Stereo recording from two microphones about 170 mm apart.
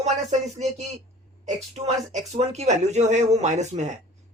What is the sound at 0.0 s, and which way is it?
Speech, 40° right (ahead or behind).